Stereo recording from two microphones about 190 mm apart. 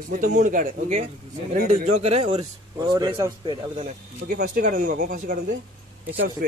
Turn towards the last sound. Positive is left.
turn(degrees=-90)